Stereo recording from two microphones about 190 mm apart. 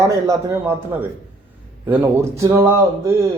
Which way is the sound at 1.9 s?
15° right (ahead or behind).